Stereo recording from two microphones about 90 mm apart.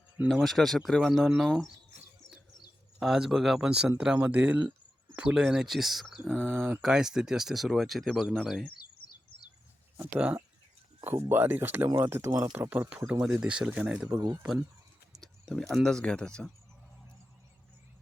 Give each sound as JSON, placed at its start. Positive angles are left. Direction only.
{"t": 0.3, "sound": "speech", "side_deg": 0}
{"t": 3.0, "sound": "speech", "side_deg": -5}
{"t": 6.3, "sound": "speech", "side_deg": -20}
{"t": 6.8, "sound": "speech", "side_deg": -5}
{"t": 10.2, "sound": "speech", "side_deg": -15}
{"t": 13.2, "sound": "speech", "side_deg": -10}
{"t": 15.2, "sound": "speech", "side_deg": 5}